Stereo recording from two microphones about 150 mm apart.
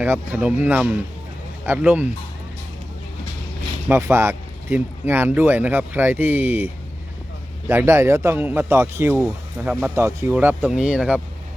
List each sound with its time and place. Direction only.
0.0 s speech: 10° right (ahead or behind)
3.8 s speech: 20° right (ahead or behind)
7.7 s speech: 15° right (ahead or behind)
9.2 s speech: 5° right (ahead or behind)
9.9 s speech: 20° right (ahead or behind)